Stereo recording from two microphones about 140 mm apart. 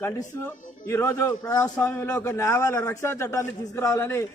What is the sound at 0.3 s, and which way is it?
A man's voice, 20° left (ahead or behind).